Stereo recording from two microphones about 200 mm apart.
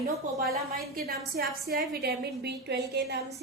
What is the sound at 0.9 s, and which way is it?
A woman's voice, 50° right (ahead or behind).